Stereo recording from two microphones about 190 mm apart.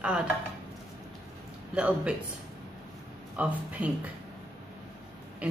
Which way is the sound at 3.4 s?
5° right (ahead or behind).